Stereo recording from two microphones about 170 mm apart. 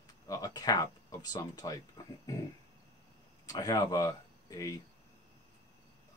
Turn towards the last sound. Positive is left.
turn(degrees=20)  # may be behind; listen again after turning